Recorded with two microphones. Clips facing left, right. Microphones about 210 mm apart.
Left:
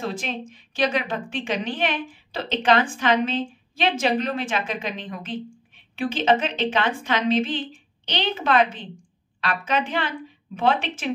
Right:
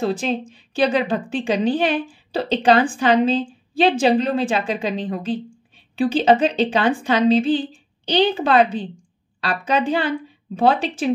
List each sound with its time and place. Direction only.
0.0 s a woman's voice: 35° right (ahead or behind)